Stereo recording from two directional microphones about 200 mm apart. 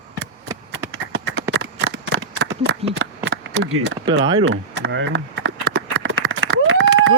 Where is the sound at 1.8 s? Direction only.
75° right (ahead or behind).